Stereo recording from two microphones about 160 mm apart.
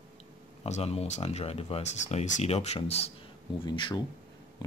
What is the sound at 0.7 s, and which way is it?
Speech, 40° left (ahead or behind).